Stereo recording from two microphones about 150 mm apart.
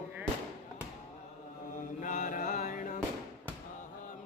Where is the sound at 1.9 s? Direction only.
60° left (ahead or behind).